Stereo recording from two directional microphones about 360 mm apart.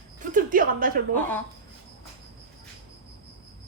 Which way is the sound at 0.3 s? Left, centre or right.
Right.